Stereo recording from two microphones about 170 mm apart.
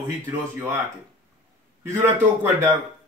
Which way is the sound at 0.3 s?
10° right (ahead or behind).